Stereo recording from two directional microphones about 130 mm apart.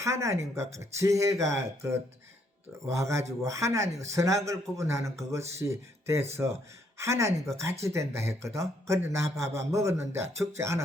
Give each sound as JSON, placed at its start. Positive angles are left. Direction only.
{"t": 0.0, "sound": "a man's voice", "side_deg": -20}